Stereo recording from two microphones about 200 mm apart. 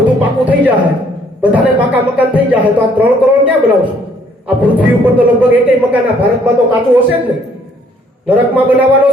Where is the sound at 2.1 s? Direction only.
5° right (ahead or behind).